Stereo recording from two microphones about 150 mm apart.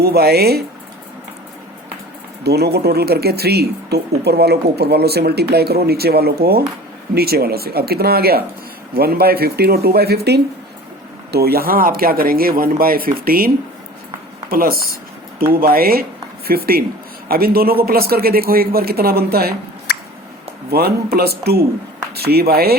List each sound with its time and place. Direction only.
0.0 s speech: 90° right
2.4 s speech: 90° right
14.5 s speech: 80° right
20.7 s speech: 90° right